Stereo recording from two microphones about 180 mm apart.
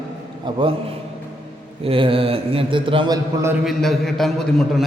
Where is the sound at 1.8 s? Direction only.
30° right (ahead or behind).